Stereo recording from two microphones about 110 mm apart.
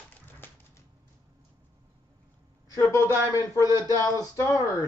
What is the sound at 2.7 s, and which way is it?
Speech, 30° left (ahead or behind).